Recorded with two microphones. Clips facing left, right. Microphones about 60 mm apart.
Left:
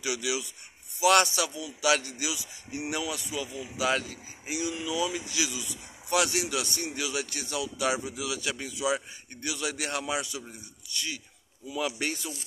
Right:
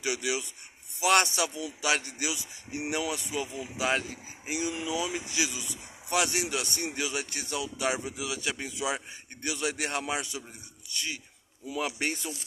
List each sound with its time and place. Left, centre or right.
0.0 s a man's voice: right